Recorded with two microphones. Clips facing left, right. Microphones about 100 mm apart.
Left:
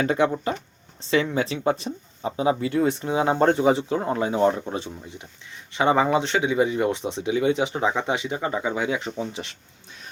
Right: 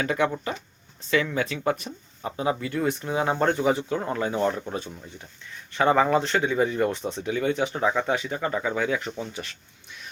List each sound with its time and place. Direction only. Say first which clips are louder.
0.0 s speech: left 3 dB; 30° left (ahead or behind)